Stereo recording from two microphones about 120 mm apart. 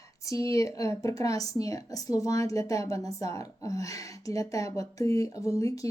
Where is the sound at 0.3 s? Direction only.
25° left (ahead or behind).